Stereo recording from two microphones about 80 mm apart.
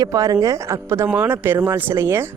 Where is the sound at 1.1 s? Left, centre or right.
Right.